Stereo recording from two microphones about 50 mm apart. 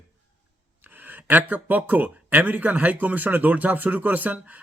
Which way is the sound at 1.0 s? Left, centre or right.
Right.